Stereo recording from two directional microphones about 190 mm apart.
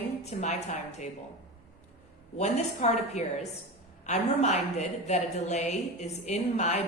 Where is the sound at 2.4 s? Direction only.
35° left (ahead or behind).